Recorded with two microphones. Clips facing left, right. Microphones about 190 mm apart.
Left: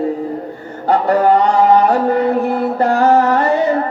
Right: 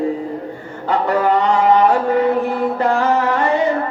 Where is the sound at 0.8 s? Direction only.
40° left (ahead or behind).